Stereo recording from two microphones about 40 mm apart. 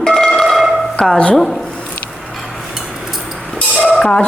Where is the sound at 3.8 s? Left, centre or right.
Centre.